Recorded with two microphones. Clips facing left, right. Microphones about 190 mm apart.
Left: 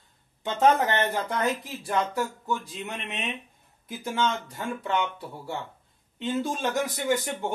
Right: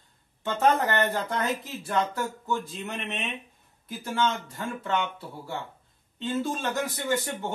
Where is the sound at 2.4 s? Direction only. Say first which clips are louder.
Right 1 dB; 15° left (ahead or behind).